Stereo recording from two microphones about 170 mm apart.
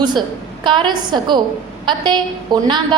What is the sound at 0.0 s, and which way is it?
A woman's voice, 25° right (ahead or behind).